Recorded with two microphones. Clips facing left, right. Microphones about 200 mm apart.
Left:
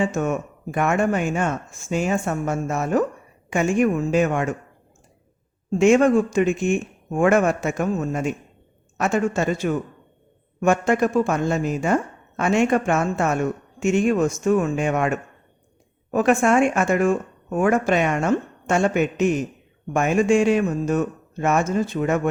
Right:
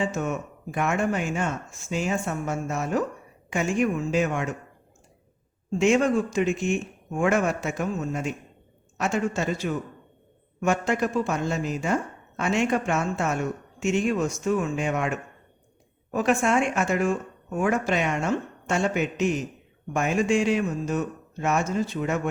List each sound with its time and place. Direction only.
0.0 s speech: 50° left (ahead or behind)
5.7 s speech: 50° left (ahead or behind)